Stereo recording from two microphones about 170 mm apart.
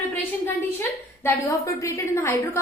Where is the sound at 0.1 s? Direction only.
15° left (ahead or behind).